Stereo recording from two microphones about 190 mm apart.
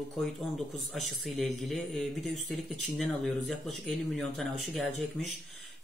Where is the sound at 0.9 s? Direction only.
Centre (ahead or behind).